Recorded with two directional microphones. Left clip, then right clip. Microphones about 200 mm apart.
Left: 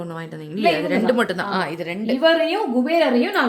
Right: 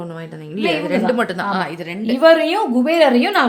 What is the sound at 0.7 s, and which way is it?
A woman's voice, 5° right (ahead or behind).